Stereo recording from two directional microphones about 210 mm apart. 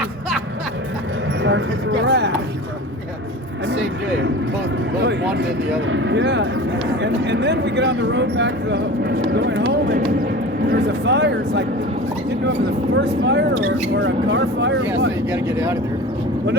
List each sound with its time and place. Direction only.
1.4 s a sound: 60° right (ahead or behind)
3.7 s vehicle: 60° right (ahead or behind)
4.9 s speech: 55° right (ahead or behind)
15.3 s speech: 10° right (ahead or behind)